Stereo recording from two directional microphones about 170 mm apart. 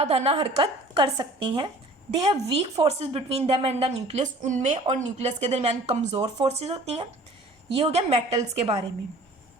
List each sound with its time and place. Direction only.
0.0 s a woman's voice: 35° right (ahead or behind)